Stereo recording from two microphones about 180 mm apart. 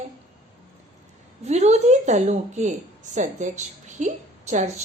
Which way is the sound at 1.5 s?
40° right (ahead or behind).